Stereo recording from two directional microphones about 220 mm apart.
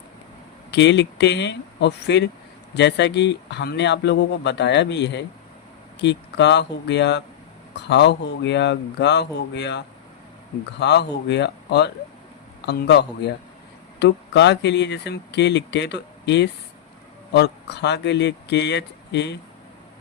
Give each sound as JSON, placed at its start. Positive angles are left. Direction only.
{"t": 0.7, "sound": "speech", "side_deg": 50}